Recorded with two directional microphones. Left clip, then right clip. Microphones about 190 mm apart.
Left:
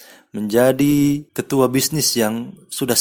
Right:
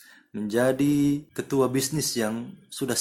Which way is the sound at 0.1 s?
40° left (ahead or behind).